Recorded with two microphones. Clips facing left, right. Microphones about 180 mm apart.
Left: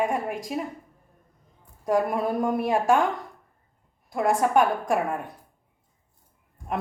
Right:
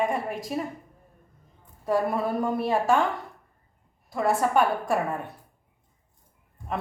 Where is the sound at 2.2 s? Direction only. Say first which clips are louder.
Left 1 dB; 15° left (ahead or behind).